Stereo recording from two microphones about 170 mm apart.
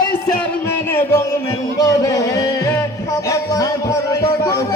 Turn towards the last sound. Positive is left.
turn(degrees=20)  # may be behind; listen again after turning